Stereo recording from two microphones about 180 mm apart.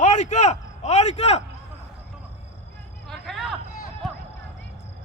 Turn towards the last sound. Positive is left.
turn(degrees=0)  # may be behind; listen again after turning